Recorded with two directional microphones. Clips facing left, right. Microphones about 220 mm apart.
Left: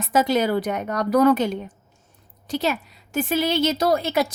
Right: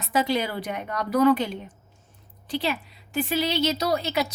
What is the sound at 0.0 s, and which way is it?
Speech, 45° left (ahead or behind).